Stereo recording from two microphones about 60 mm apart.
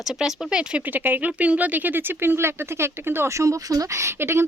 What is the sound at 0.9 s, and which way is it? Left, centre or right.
Speech, right.